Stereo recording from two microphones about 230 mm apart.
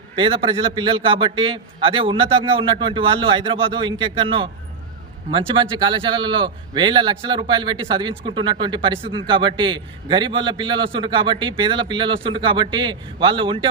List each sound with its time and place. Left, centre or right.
0.2 s a man's voice: right